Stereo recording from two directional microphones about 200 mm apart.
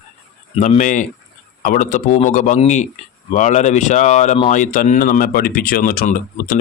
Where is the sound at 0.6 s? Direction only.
40° left (ahead or behind).